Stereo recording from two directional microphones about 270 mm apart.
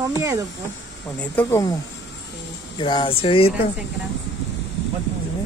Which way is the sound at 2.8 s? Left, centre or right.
Centre.